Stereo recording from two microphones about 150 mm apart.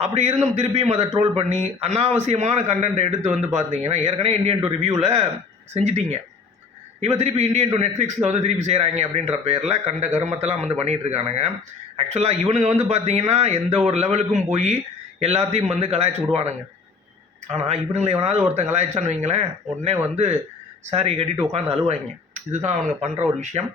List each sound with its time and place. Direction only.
0.0 s speech: 45° right (ahead or behind)
17.5 s speech: 45° right (ahead or behind)